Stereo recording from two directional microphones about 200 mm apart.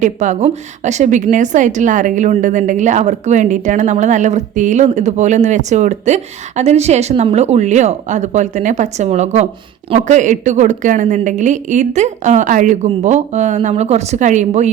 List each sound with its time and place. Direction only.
0.0 s a woman's voice: 35° right (ahead or behind)